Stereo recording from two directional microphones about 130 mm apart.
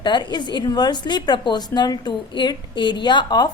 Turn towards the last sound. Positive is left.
turn(degrees=35)  # may be behind; listen again after turning